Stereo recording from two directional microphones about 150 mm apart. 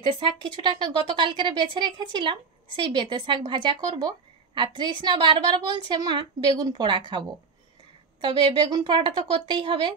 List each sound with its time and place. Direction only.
0.0 s speech: 35° right (ahead or behind)